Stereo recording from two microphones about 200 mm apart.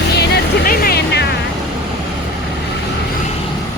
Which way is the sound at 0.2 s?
50° left (ahead or behind).